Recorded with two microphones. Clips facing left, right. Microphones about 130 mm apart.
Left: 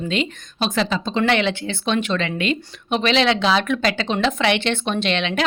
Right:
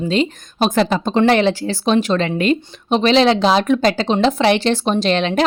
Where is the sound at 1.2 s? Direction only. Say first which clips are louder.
Right 6 dB; 35° right (ahead or behind).